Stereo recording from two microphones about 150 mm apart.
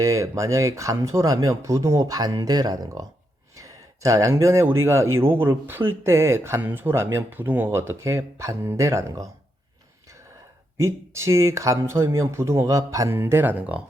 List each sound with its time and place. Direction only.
0.0 s speech: 20° right (ahead or behind)
10.8 s speech: 20° right (ahead or behind)